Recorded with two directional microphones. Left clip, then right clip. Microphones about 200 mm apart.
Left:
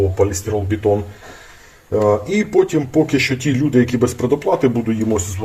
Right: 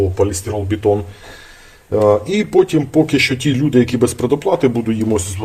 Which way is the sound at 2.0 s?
15° right (ahead or behind).